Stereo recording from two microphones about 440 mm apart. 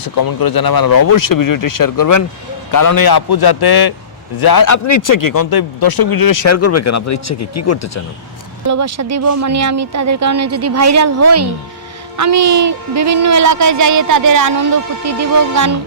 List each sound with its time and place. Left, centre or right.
0.0 s a man's voice: left
8.6 s speech: right